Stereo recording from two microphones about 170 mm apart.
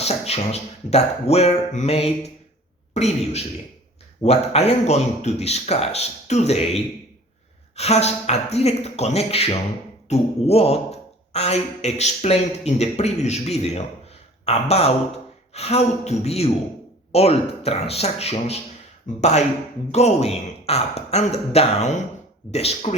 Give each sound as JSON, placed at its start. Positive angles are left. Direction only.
{"t": 0.0, "sound": "speech", "side_deg": 40}